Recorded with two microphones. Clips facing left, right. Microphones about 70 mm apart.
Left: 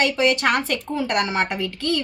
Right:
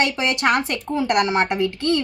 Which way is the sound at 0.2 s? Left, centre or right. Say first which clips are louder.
Even; right.